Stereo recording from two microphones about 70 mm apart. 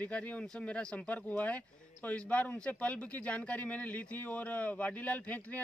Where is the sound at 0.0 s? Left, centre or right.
Left.